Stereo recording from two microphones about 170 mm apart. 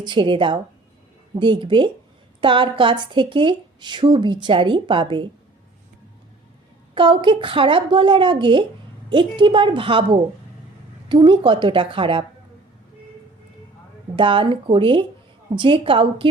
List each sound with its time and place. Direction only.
0.0 s a woman's voice: 30° right (ahead or behind)
6.9 s a woman's voice: 30° right (ahead or behind)
14.2 s a woman's voice: 30° right (ahead or behind)